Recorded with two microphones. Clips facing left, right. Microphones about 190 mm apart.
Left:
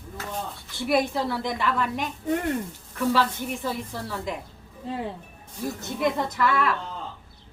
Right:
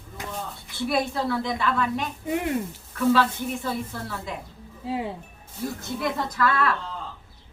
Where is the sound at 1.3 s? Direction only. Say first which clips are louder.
Right 1 dB; 10° left (ahead or behind).